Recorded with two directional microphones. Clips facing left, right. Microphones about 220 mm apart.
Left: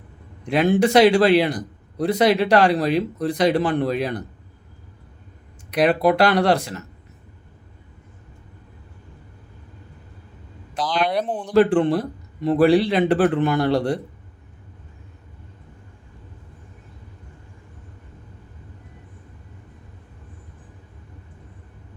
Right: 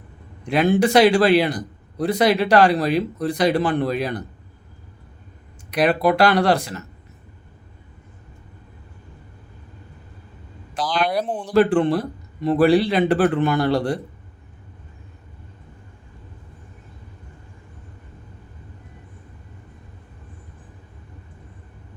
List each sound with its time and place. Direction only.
0.5 s speech: 25° left (ahead or behind)
5.7 s speech: 25° left (ahead or behind)
11.1 s speech: centre (ahead or behind)
11.5 s speech: 20° left (ahead or behind)